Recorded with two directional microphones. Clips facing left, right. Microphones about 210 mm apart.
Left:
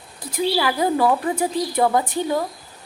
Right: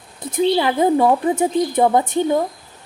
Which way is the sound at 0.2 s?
20° right (ahead or behind).